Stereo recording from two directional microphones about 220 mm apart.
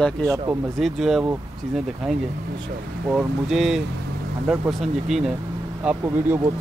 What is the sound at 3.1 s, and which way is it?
Speech, centre (ahead or behind).